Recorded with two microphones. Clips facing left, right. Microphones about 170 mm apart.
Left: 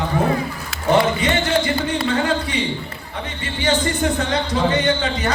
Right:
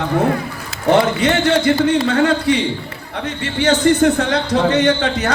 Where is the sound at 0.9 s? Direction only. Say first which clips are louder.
Right 3 dB; 65° right (ahead or behind).